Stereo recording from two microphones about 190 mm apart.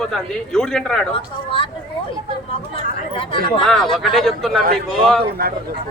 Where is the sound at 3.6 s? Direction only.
Centre (ahead or behind).